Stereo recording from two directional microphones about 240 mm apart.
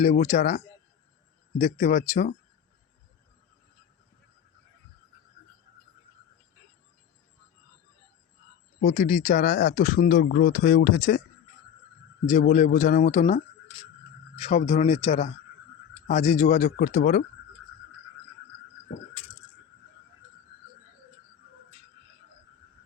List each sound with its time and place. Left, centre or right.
0.0 s speech: left
8.8 s speech: left
12.2 s speech: left